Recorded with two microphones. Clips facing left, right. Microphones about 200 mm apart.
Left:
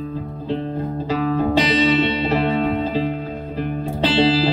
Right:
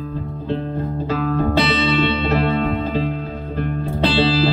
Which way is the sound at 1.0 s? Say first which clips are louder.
Left 1 dB; 10° left (ahead or behind).